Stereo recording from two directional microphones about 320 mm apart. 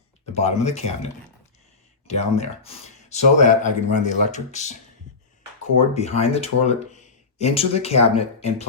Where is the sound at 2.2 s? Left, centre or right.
Centre.